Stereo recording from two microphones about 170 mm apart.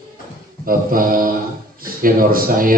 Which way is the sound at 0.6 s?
55° right (ahead or behind).